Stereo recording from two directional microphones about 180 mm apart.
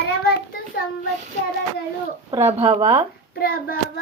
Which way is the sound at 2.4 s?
30° right (ahead or behind).